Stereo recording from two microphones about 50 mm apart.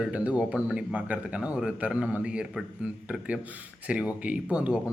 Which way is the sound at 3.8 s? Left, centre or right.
Right.